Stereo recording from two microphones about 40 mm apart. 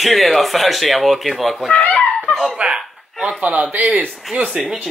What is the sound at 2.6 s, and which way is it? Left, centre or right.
A man's voice, right.